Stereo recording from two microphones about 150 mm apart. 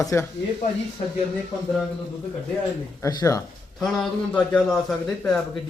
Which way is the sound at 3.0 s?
20° left (ahead or behind).